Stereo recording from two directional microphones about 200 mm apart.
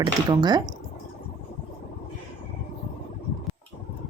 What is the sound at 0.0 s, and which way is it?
Speech, 20° right (ahead or behind).